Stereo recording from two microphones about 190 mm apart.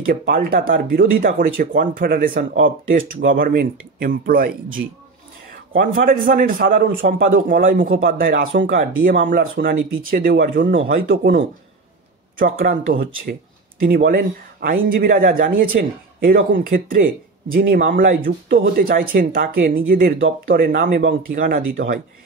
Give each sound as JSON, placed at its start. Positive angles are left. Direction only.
{"t": 0.0, "sound": "speech", "side_deg": -50}
{"t": 5.7, "sound": "speech", "side_deg": -50}
{"t": 11.1, "sound": "speech", "side_deg": -60}
{"t": 12.4, "sound": "speech", "side_deg": -45}